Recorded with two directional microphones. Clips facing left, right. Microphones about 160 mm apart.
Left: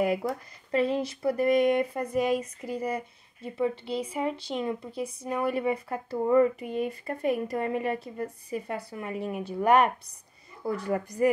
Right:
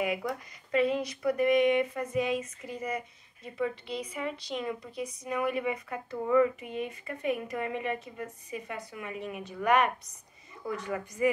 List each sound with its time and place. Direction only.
0.0 s speech: 35° left (ahead or behind)